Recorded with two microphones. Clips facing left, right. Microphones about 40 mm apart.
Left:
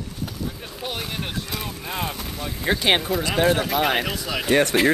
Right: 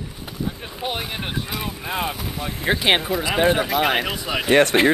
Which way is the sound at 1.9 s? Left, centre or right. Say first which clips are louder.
Right 3 dB; centre.